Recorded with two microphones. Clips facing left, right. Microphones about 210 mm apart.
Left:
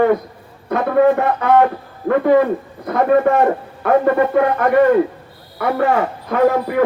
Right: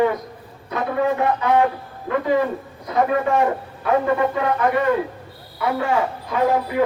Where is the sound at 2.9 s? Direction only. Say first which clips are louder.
Left 5 dB; 55° left (ahead or behind).